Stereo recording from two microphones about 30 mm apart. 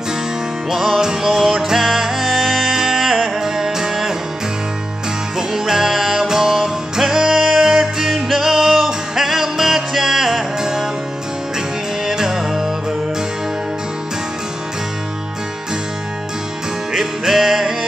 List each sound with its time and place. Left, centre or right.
0.7 s music: centre
5.5 s music: centre
12.1 s music: centre
16.9 s music: centre